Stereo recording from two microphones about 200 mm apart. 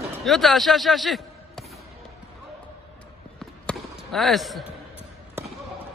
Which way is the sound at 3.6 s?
Centre (ahead or behind).